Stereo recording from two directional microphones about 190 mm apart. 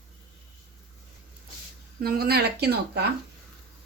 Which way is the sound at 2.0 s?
55° right (ahead or behind).